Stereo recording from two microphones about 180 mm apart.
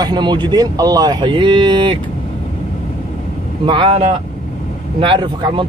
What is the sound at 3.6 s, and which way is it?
Speech, 30° right (ahead or behind).